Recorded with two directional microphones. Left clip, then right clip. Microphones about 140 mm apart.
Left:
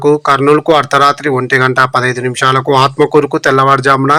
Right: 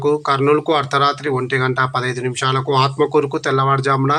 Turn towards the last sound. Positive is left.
turn(degrees=45)  # may be behind; listen again after turning